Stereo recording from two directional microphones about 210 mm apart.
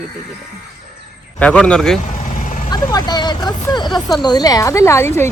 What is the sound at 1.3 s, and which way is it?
Speech, 5° left (ahead or behind).